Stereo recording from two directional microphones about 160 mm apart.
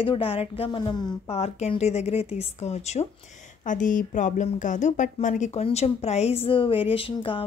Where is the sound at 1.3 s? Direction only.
40° left (ahead or behind).